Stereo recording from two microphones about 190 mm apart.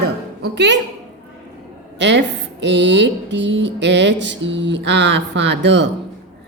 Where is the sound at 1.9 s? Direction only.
65° right (ahead or behind).